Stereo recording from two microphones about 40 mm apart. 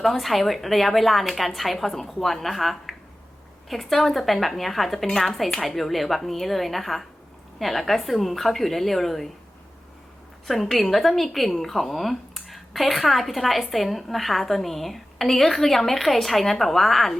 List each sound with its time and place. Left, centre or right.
0.0 s speech: centre
10.4 s speech: centre